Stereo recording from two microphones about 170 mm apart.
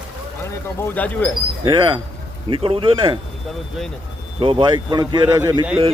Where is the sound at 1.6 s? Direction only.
25° right (ahead or behind).